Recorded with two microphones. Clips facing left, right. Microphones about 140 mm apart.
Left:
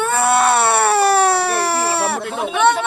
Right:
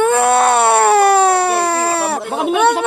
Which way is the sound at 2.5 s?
10° right (ahead or behind).